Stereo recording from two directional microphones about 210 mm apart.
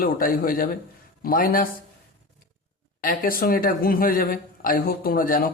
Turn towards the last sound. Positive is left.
turn(degrees=40)  # may be behind; listen again after turning